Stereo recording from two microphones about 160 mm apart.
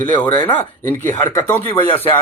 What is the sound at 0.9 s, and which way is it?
Speech, 15° left (ahead or behind).